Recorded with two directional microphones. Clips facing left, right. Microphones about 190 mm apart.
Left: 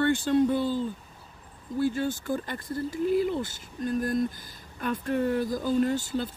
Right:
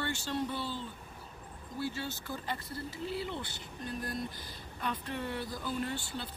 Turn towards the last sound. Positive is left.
turn(degrees=45)  # may be behind; listen again after turning